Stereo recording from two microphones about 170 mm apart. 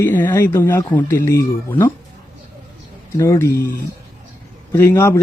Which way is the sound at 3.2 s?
15° left (ahead or behind).